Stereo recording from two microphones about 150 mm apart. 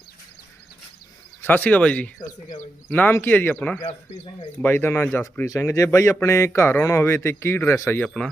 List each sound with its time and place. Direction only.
1.4 s a man's voice: 15° left (ahead or behind)